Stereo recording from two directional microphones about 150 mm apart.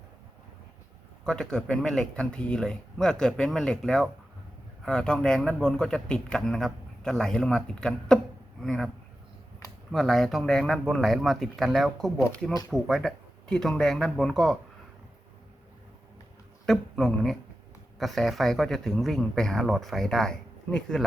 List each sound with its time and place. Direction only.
1.2 s speech: 5° left (ahead or behind)
9.9 s speech: centre (ahead or behind)
16.6 s speech: 5° left (ahead or behind)